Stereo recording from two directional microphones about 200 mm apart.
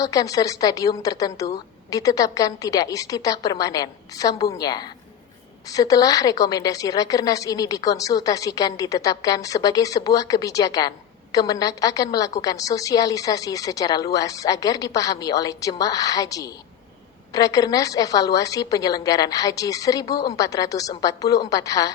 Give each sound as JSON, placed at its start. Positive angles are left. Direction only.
{"t": 0.0, "sound": "a woman's voice", "side_deg": 15}